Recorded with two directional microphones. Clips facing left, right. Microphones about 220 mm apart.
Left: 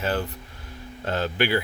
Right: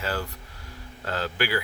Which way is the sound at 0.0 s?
20° left (ahead or behind).